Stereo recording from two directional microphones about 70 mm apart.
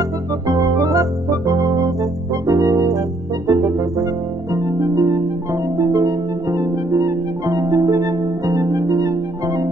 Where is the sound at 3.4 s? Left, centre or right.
Right.